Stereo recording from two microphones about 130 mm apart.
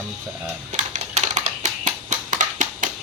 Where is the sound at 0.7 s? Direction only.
60° right (ahead or behind).